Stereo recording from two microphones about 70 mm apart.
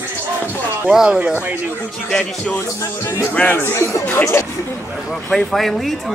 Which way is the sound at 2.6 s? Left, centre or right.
Left.